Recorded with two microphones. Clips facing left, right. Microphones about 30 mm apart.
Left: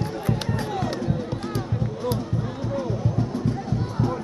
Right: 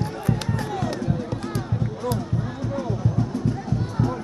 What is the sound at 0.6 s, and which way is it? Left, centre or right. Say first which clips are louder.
Music: even; centre.